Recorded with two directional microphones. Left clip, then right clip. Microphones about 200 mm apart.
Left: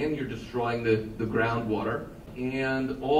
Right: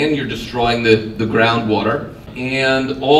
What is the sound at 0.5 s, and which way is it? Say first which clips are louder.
Speech: right 13 dB; 45° right (ahead or behind).